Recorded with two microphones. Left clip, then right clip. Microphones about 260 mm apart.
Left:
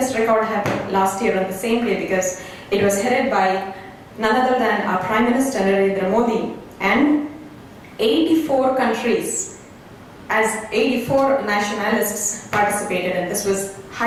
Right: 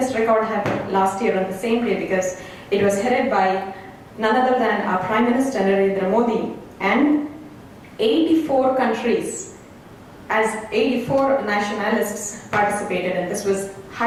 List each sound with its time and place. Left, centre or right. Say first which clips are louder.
0.0 s a woman's voice: left 1 dB; centre
10.2 s a woman's voice: left 1 dB; centre